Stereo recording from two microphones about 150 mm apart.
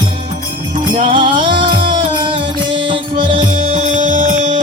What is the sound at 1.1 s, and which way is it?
Music, 35° right (ahead or behind).